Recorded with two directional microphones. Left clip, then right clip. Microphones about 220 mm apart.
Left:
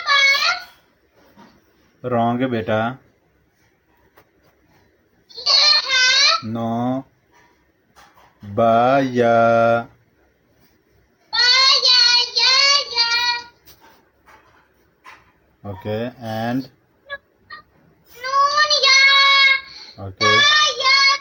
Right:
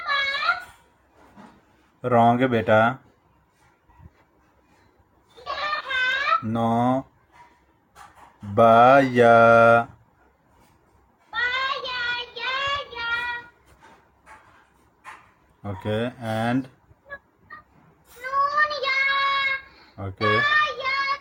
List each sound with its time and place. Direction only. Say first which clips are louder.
0.3 s a sound: left 5 dB; 45° left (ahead or behind)
2.0 s mantra: right 2 dB; 5° right (ahead or behind)
5.4 s a sound: left 13 dB; 45° left (ahead or behind)
6.5 s mantra: right 1 dB; centre (ahead or behind)
8.5 s mantra: right 1 dB; centre (ahead or behind)
11.3 s child singing: left 11 dB; 45° left (ahead or behind)
15.6 s mantra: left 1 dB; centre (ahead or behind)
18.2 s child singing: left 5 dB; 25° left (ahead or behind)